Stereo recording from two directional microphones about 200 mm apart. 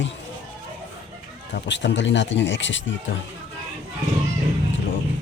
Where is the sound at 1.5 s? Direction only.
60° left (ahead or behind).